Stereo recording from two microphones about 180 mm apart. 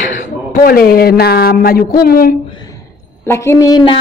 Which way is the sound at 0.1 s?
50° left (ahead or behind).